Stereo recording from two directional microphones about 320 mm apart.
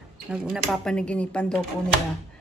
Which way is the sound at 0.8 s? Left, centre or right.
Centre.